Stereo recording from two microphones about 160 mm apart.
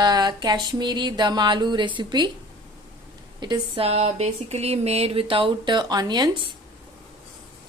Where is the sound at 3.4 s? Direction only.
25° right (ahead or behind).